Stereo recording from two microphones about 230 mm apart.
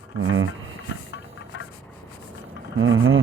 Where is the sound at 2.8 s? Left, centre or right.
Right.